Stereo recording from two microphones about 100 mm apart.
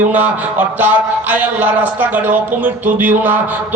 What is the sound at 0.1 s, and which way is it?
A man's voice, 15° right (ahead or behind).